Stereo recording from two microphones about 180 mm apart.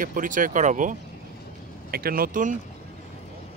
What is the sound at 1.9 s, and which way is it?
Speech, 55° right (ahead or behind).